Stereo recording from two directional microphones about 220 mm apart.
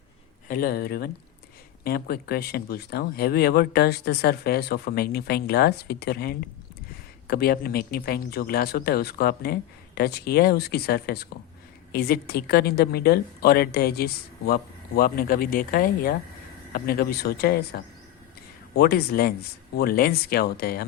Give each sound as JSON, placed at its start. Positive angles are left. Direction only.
{"t": 0.4, "sound": "speech", "side_deg": 40}
{"t": 18.8, "sound": "speech", "side_deg": 45}